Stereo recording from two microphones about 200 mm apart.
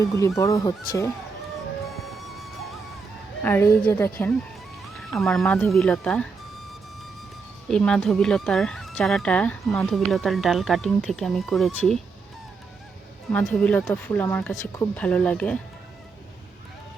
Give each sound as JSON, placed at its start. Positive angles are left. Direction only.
{"t": 0.0, "sound": "a woman's voice", "side_deg": 15}
{"t": 2.1, "sound": "music", "side_deg": 0}
{"t": 3.4, "sound": "a woman's voice", "side_deg": 10}
{"t": 7.7, "sound": "speech", "side_deg": 5}
{"t": 13.3, "sound": "a woman's voice", "side_deg": 5}